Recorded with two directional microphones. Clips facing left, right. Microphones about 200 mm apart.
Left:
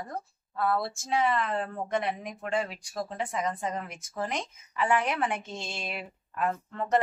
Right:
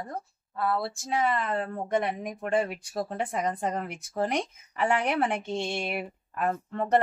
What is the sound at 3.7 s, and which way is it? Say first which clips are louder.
Speech: right 3 dB; 40° right (ahead or behind).